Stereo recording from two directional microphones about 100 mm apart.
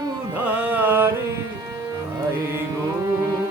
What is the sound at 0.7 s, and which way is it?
Music, 20° right (ahead or behind).